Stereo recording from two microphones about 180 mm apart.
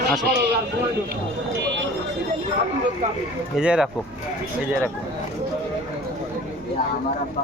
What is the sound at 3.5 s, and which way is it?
Speech, 5° right (ahead or behind).